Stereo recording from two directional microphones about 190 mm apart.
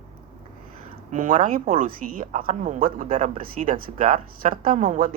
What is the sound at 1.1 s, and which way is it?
Speech, 40° right (ahead or behind).